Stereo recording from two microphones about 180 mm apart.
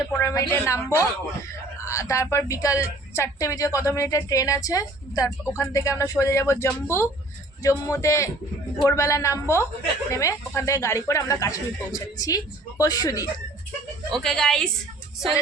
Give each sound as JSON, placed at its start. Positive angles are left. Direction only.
{"t": 0.1, "sound": "a woman's voice", "side_deg": 15}
{"t": 14.1, "sound": "a woman's voice", "side_deg": 5}